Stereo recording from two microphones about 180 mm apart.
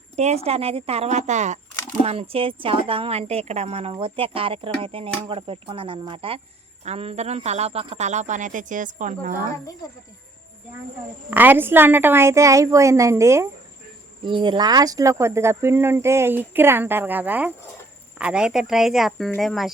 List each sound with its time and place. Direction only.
0.2 s a woman's voice: 35° right (ahead or behind)
11.3 s speech: 10° right (ahead or behind)
14.3 s speech: 25° right (ahead or behind); by 19.7 s centre (ahead or behind)